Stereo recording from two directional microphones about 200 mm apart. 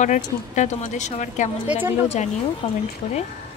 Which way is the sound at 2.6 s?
30° left (ahead or behind).